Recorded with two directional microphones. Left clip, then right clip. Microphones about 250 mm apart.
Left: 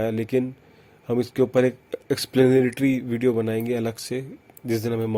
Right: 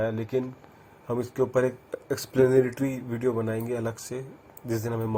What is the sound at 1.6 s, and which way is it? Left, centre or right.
Speech, left.